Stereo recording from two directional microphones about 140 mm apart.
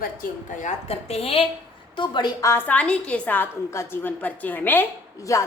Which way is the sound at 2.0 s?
30° left (ahead or behind).